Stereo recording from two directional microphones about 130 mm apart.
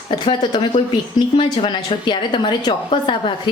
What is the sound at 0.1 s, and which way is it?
A woman's voice, 45° left (ahead or behind).